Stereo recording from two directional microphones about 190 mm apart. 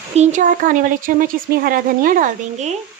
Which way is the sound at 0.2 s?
40° right (ahead or behind).